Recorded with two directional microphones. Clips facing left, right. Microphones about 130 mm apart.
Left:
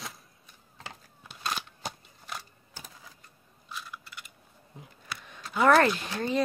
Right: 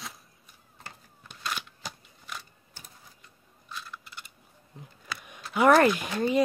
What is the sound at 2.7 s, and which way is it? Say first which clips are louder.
Printer: left 4 dB; 90° left.